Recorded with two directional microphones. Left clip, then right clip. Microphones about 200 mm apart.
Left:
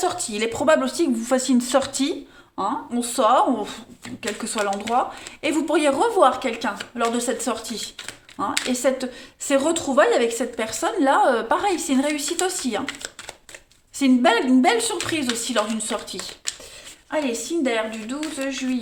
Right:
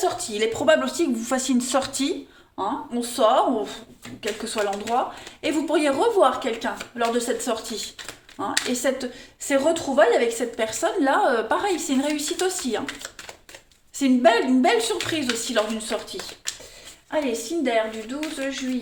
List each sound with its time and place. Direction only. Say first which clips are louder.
0.0 s speech: even; 40° left (ahead or behind)
2.6 s speech: left 2 dB; 35° left (ahead or behind)
14.0 s speech: even; 35° left (ahead or behind)
17.6 s speech: right 1 dB; 40° left (ahead or behind)